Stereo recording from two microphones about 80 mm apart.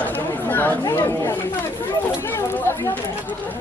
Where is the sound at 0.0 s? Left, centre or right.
Left.